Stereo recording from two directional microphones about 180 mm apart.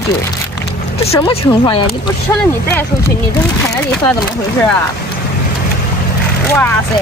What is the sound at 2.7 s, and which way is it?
Speech, 10° left (ahead or behind).